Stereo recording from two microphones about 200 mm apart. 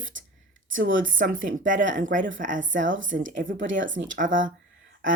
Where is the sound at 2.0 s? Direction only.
40° right (ahead or behind).